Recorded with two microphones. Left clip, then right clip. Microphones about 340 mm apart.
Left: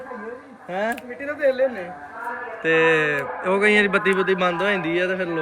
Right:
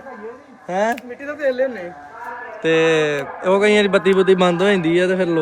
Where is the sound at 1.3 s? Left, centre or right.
Right.